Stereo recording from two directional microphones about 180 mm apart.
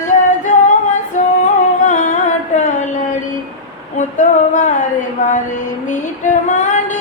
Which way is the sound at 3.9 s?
45° left (ahead or behind).